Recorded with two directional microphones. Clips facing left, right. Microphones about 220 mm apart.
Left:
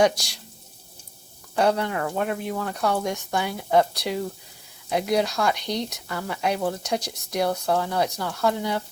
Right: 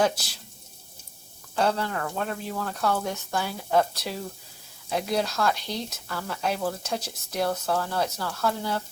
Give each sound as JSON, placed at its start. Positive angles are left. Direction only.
{"t": 1.5, "sound": "speech", "side_deg": 15}